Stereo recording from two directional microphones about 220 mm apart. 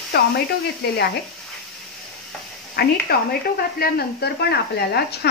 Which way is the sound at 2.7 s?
45° left (ahead or behind).